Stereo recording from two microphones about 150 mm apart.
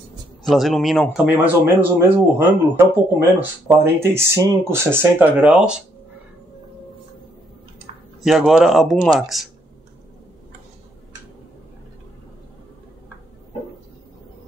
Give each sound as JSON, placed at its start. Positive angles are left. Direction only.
{"t": 0.4, "sound": "speech", "side_deg": 0}
{"t": 1.2, "sound": "speech", "side_deg": -10}
{"t": 8.2, "sound": "speech", "side_deg": -5}